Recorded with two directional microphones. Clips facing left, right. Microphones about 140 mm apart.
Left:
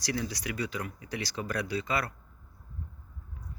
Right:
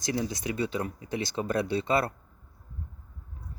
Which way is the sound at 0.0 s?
25° right (ahead or behind).